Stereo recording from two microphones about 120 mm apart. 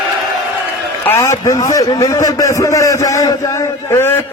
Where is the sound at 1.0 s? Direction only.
20° left (ahead or behind).